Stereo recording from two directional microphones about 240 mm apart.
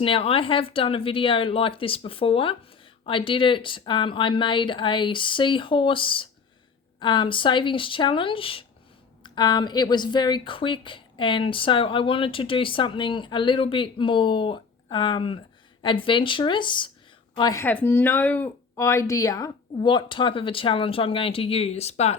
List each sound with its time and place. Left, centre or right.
0.0 s a woman's voice: left